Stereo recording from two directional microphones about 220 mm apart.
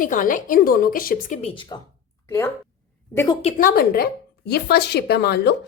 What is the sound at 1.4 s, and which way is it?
Speech, 25° left (ahead or behind).